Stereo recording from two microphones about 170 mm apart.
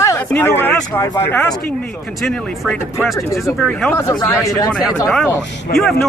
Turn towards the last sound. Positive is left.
turn(degrees=0)  # may be behind; listen again after turning